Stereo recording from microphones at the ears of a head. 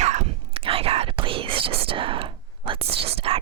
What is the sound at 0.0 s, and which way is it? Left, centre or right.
Whispering, right.